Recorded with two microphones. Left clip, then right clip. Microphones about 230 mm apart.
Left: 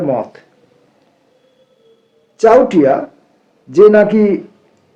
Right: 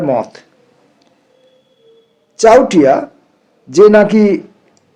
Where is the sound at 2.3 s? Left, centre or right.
Right.